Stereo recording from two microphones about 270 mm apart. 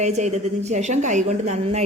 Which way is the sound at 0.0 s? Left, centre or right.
Right.